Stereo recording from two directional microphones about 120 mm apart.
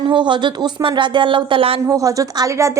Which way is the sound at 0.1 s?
40° right (ahead or behind).